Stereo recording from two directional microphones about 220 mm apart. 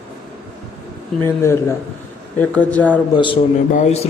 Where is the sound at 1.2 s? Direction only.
10° left (ahead or behind).